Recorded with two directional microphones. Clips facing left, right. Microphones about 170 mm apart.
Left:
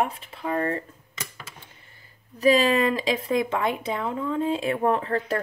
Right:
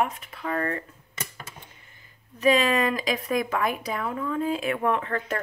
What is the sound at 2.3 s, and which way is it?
Speech, 35° left (ahead or behind).